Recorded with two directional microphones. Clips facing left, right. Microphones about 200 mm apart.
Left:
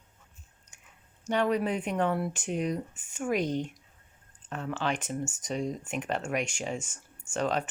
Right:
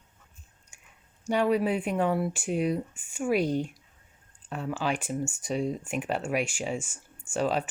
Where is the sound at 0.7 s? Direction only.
10° right (ahead or behind).